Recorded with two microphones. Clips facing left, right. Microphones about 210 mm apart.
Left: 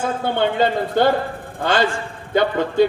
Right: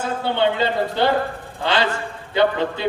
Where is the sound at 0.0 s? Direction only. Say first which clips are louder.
Even; 50° left (ahead or behind).